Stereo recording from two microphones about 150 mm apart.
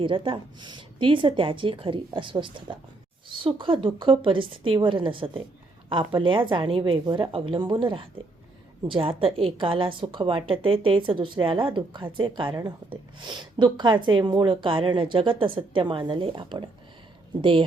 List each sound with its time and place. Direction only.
0.0 s speech: 35° right (ahead or behind)